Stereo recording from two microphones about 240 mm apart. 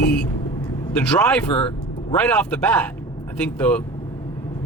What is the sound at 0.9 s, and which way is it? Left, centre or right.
Speech, centre.